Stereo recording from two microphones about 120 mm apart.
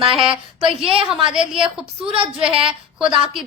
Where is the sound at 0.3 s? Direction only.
50° right (ahead or behind).